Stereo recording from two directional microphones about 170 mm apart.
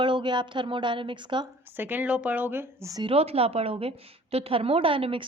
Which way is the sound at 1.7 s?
10° right (ahead or behind).